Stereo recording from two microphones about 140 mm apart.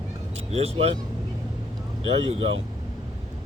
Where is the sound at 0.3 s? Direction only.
45° right (ahead or behind).